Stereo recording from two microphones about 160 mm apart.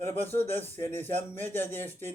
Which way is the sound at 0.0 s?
45° right (ahead or behind).